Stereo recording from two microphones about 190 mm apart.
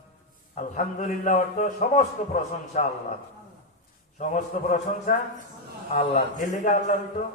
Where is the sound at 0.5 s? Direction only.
45° left (ahead or behind).